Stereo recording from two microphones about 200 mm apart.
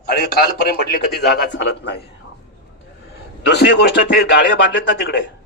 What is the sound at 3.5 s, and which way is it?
A man's voice, 55° left (ahead or behind).